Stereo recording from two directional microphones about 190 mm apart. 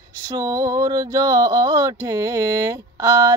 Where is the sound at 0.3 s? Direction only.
20° right (ahead or behind).